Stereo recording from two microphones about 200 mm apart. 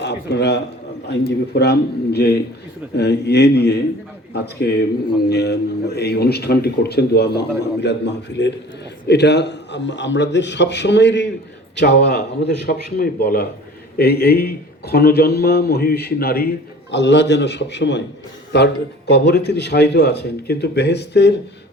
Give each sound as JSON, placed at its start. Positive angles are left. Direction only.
{"t": 0.0, "sound": "a man's voice", "side_deg": 60}